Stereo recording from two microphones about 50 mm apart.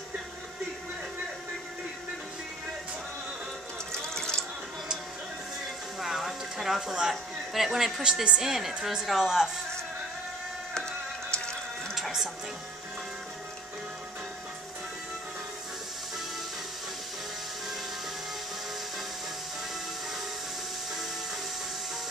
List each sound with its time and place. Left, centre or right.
3.9 s water: centre
5.9 s a sound: centre
8.0 s a woman's voice: centre
8.4 s a woman's voice: centre
11.9 s music: centre